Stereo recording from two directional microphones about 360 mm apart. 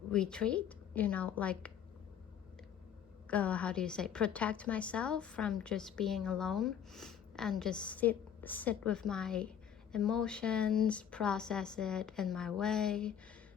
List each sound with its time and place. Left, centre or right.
0.1 s a woman's voice: centre
3.2 s a woman's voice: centre